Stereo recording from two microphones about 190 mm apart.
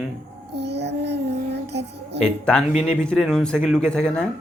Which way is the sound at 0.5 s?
60° right (ahead or behind).